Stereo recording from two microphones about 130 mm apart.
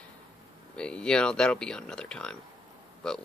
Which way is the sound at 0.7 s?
5° left (ahead or behind).